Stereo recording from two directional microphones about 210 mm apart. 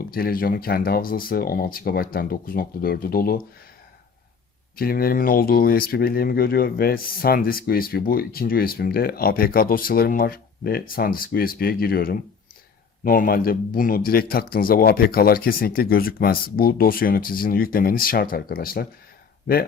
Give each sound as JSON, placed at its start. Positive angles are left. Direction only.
{"t": 0.0, "sound": "speech", "side_deg": 45}
{"t": 4.8, "sound": "speech", "side_deg": 45}